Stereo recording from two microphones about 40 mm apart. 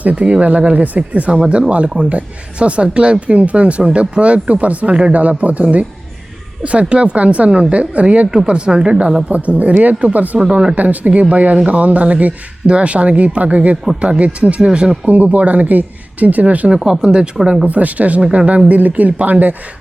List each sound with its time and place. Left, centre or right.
0.0 s speech: right
8.4 s speech: right
9.3 s speech: right
10.3 s speech: right
10.8 s speech: right
15.0 s speech: right
16.8 s speech: centre
17.7 s speech: right
18.7 s speech: right